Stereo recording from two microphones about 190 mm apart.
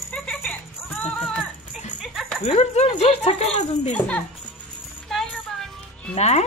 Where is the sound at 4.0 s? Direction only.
10° left (ahead or behind).